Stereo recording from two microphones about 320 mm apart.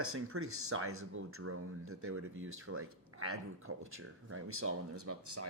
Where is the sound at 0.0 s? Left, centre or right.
Right.